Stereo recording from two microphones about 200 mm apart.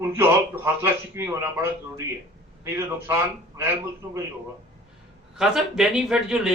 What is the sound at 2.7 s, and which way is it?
Speech, 10° right (ahead or behind).